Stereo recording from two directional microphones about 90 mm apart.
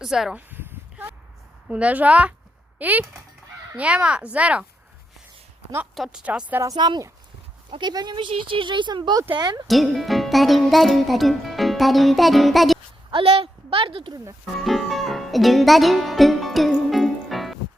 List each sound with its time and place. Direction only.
0.0 s a child's voice: 5° right (ahead or behind)
0.3 s a sound: 20° right (ahead or behind)
1.6 s speech: 15° right (ahead or behind)
5.9 s speech: 5° right (ahead or behind)
6.7 s speech: 55° right (ahead or behind)
9.6 s a child's voice: centre (ahead or behind)
13.1 s a woman's voice: 80° right
14.6 s music: centre (ahead or behind)